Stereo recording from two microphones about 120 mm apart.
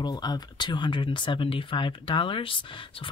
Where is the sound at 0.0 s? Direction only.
35° left (ahead or behind).